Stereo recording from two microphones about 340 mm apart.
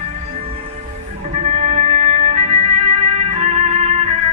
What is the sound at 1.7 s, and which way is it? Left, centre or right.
Music, centre.